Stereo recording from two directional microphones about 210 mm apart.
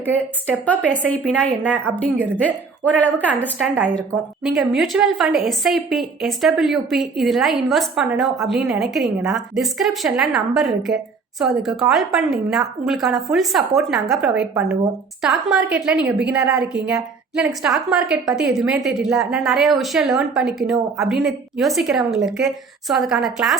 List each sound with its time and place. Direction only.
0.0 s a woman's voice: 10° right (ahead or behind)
2.8 s a woman's voice: 5° left (ahead or behind)
3.2 s a woman's voice: 5° right (ahead or behind)